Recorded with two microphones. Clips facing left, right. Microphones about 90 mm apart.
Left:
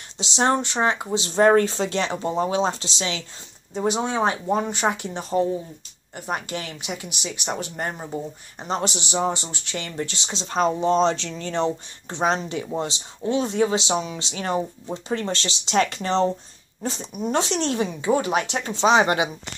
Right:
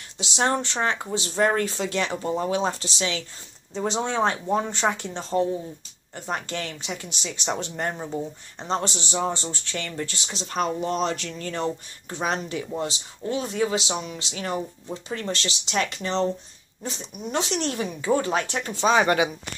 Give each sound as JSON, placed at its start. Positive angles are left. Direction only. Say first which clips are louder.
{"t": 0.2, "sound": "speech", "louder": "left 3 dB", "side_deg": 25}
{"t": 1.2, "sound": "speech", "louder": "left 6 dB", "side_deg": 25}
{"t": 3.7, "sound": "speech", "louder": "left 2 dB", "side_deg": 10}